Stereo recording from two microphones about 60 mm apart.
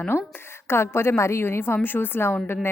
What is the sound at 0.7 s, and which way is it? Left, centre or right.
A woman's voice, left.